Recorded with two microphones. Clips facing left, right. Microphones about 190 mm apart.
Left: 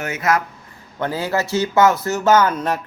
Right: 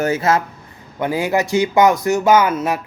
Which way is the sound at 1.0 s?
15° right (ahead or behind).